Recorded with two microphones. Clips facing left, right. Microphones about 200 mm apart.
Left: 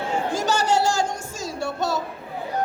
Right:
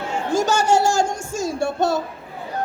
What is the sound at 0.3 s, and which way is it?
Music, 45° right (ahead or behind).